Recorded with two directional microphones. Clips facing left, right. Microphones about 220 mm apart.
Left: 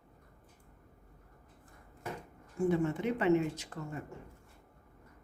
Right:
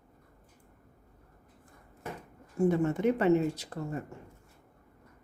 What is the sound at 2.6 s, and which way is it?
Speech, 40° right (ahead or behind).